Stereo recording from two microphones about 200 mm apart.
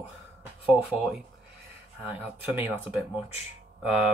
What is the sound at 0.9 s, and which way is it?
Speech, centre (ahead or behind).